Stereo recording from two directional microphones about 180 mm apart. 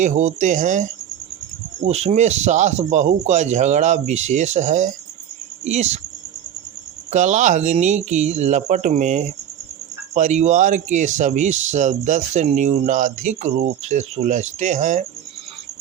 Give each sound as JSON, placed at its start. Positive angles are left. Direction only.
{"t": 0.0, "sound": "speech", "side_deg": -45}
{"t": 7.1, "sound": "speech", "side_deg": -40}